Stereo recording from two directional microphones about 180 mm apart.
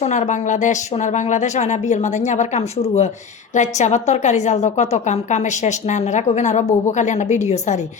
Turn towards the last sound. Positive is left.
turn(degrees=40)  # may be behind; listen again after turning